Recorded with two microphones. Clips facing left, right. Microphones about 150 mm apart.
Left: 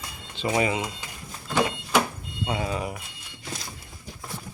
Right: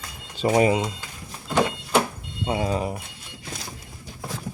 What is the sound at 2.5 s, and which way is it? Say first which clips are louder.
Speech: right 4 dB; 30° right (ahead or behind).